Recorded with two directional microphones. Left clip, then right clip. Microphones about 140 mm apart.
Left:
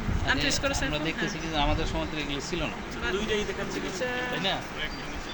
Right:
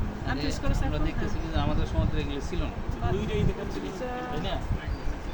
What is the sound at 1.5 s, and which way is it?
Speech, 30° left (ahead or behind).